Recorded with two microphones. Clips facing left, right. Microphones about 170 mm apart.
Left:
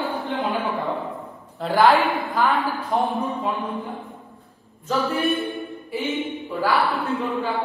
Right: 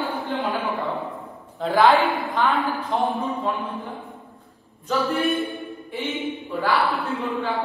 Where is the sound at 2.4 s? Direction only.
35° left (ahead or behind).